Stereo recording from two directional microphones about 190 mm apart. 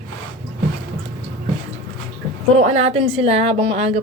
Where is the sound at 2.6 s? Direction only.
35° right (ahead or behind).